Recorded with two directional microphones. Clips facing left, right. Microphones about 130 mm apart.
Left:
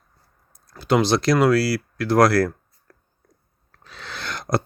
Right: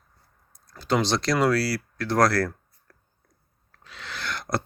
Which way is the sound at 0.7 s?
10° left (ahead or behind).